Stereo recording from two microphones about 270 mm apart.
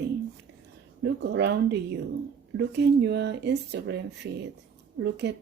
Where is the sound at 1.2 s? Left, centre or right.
Right.